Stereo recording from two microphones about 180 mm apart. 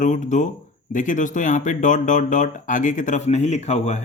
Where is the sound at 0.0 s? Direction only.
45° left (ahead or behind).